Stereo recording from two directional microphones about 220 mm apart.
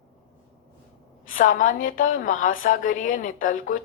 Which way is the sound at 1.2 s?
35° left (ahead or behind).